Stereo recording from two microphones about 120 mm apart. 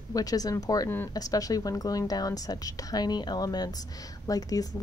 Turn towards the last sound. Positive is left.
turn(degrees=30)  # may be behind; listen again after turning